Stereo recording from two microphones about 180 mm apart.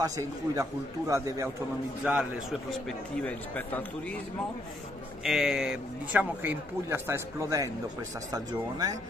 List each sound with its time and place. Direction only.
0.0 s speech: 20° right (ahead or behind)
2.0 s speech: 5° right (ahead or behind)
2.7 s speech: 5° left (ahead or behind)
5.2 s speech: 5° right (ahead or behind); by 8.9 s 20° right (ahead or behind)